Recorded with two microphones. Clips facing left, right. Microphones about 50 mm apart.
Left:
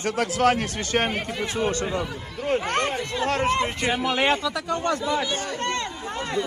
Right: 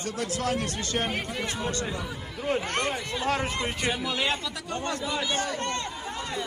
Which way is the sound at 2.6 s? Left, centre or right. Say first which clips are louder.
Left 4 dB; left.